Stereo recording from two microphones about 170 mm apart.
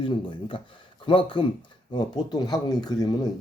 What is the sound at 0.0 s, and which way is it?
Speech, 30° left (ahead or behind).